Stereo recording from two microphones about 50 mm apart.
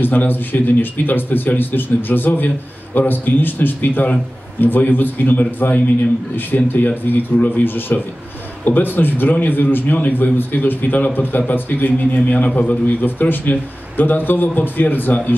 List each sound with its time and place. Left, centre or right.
0.0 s speech: left
7.6 s speech: left
13.0 s speech: left